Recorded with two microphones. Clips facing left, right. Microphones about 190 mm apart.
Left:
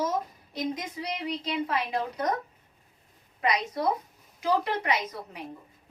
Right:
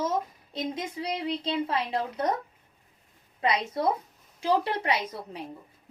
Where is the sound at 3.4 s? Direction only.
25° right (ahead or behind).